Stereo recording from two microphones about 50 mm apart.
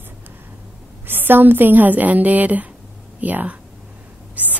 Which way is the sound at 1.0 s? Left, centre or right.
Right.